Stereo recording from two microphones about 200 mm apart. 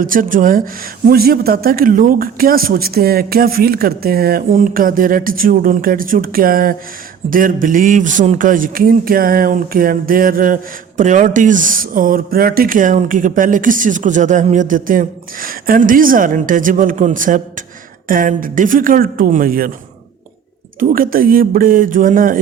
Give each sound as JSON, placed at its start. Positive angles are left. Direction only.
{"t": 0.0, "sound": "speech", "side_deg": -45}
{"t": 20.7, "sound": "speech", "side_deg": -45}